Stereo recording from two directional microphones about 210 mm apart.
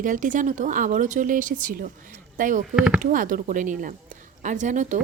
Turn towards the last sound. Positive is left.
turn(degrees=-35)  # may be behind; listen again after turning